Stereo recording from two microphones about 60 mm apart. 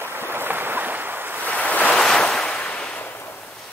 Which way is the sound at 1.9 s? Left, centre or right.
Centre.